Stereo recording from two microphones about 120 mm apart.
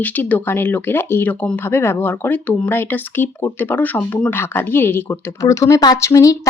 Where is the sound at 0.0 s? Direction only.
15° left (ahead or behind).